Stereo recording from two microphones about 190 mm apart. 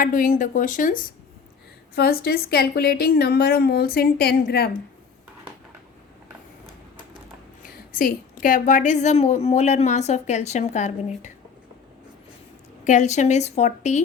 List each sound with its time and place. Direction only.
0.0 s a woman's voice: 45° left (ahead or behind)
7.9 s a woman's voice: 45° left (ahead or behind)
12.8 s a woman's voice: 40° left (ahead or behind)